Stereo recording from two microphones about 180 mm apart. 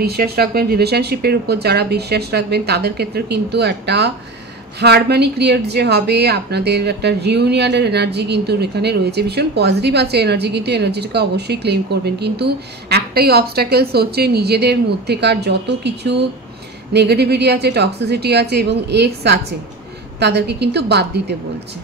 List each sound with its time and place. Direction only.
0.0 s speech: 60° right (ahead or behind)